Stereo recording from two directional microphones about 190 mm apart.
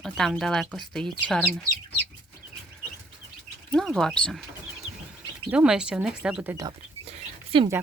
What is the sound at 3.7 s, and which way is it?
Speech, 5° left (ahead or behind).